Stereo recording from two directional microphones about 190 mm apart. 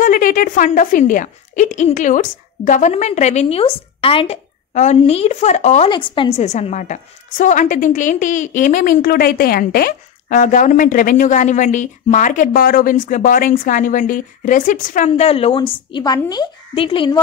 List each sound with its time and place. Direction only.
0.0 s speech: 45° left (ahead or behind)
5.9 s a woman's voice: 25° left (ahead or behind)
6.4 s a woman's voice: 40° left (ahead or behind)